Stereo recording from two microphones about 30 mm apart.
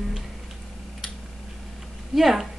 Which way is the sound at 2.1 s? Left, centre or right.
Centre.